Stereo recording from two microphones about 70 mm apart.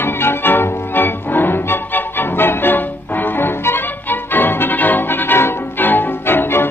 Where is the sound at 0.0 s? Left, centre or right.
Left.